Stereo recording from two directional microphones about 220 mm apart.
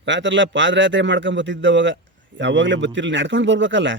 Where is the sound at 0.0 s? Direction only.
55° right (ahead or behind).